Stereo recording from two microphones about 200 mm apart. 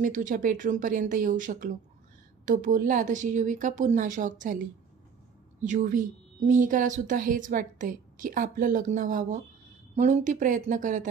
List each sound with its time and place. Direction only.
0.0 s a woman's voice: 40° right (ahead or behind)